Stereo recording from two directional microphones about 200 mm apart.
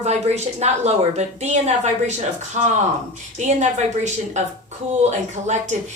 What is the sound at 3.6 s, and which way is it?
Speech, 35° right (ahead or behind).